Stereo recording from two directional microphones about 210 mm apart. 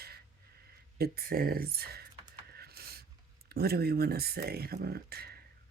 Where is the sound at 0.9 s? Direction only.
45° right (ahead or behind).